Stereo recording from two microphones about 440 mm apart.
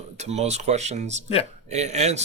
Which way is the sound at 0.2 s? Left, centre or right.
Centre.